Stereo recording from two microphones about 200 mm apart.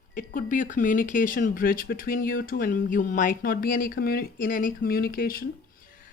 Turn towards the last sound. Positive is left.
turn(degrees=45)  # may be behind; listen again after turning